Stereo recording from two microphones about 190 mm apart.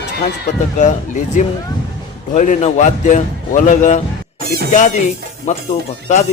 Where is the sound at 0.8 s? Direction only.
40° left (ahead or behind).